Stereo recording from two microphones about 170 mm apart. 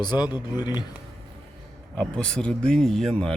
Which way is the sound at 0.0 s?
25° left (ahead or behind).